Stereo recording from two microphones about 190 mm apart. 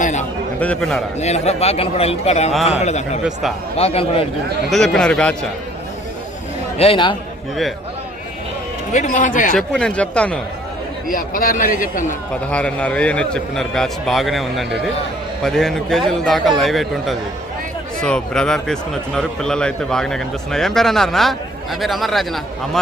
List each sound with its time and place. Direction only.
0.0 s a sound: 40° left (ahead or behind)
0.6 s speech: 5° left (ahead or behind)
1.2 s speech: 35° left (ahead or behind)
4.7 s speech: 5° left (ahead or behind)
6.7 s a man's voice: 30° left (ahead or behind)
8.9 s speech: 40° left (ahead or behind)
9.6 s speech: 5° left (ahead or behind)
11.1 s a man's voice: 45° left (ahead or behind)
12.5 s speech: 5° left (ahead or behind)